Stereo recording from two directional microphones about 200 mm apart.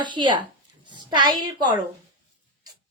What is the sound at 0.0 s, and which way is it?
A woman's voice, 25° right (ahead or behind).